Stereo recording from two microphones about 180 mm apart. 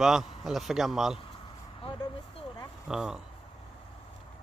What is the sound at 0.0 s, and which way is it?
A man's voice, centre (ahead or behind).